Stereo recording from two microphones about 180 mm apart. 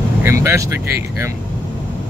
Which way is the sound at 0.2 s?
15° right (ahead or behind).